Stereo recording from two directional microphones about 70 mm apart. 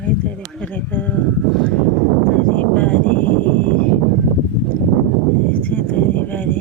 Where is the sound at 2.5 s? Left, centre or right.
Left.